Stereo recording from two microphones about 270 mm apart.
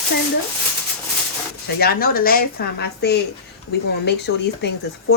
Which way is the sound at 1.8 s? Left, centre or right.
Left.